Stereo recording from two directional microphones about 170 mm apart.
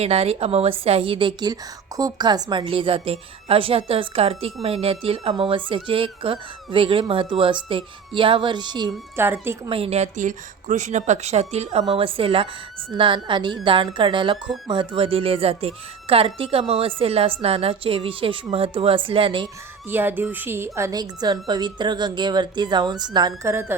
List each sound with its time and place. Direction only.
0.0 s speech: 35° right (ahead or behind)
9.1 s speech: 10° right (ahead or behind)
9.6 s speech: 35° right (ahead or behind)
19.9 s speech: 10° right (ahead or behind)